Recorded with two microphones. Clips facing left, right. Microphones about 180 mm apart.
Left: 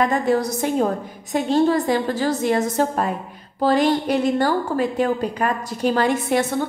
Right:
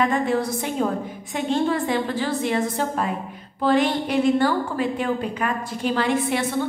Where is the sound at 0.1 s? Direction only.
40° left (ahead or behind).